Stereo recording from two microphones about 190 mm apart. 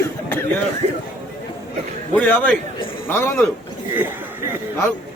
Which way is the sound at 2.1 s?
10° left (ahead or behind).